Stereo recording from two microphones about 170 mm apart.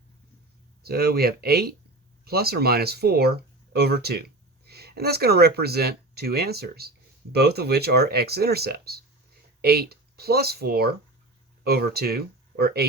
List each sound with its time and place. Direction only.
0.8 s speech: 65° right (ahead or behind)